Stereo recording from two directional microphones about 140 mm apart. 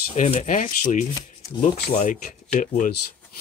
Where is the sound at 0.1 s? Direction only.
55° left (ahead or behind).